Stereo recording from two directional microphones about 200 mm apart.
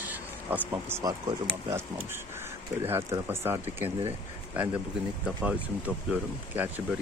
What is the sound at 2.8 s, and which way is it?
Speech, 10° right (ahead or behind).